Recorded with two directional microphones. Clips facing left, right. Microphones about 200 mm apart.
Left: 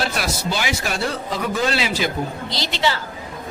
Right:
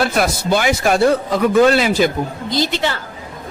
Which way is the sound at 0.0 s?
55° right (ahead or behind).